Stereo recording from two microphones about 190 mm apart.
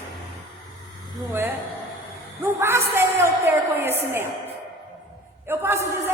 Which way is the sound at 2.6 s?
15° right (ahead or behind).